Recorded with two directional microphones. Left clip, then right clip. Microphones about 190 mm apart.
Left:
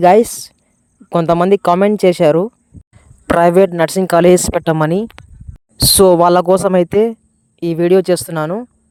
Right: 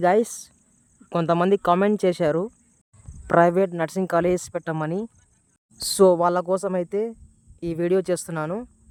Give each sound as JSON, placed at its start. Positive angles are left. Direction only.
{"t": 0.0, "sound": "speech", "side_deg": 30}
{"t": 1.9, "sound": "cricket", "side_deg": 30}
{"t": 3.8, "sound": "speech", "side_deg": 40}
{"t": 7.6, "sound": "speech", "side_deg": 35}